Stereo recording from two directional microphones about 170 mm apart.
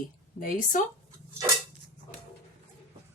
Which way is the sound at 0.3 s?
50° left (ahead or behind).